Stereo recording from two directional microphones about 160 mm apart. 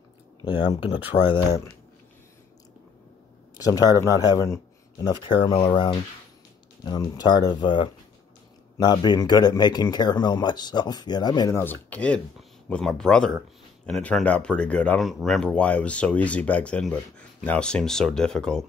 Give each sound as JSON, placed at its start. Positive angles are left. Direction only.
{"t": 1.3, "sound": "speech", "side_deg": 25}
{"t": 3.5, "sound": "speech", "side_deg": 25}